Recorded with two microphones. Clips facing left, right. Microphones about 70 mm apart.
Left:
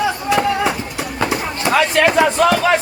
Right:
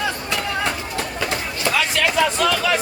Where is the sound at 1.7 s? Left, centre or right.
Left.